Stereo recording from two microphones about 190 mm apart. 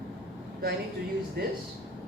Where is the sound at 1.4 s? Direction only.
55° right (ahead or behind).